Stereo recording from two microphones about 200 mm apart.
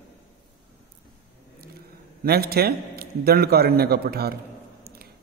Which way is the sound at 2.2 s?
50° right (ahead or behind).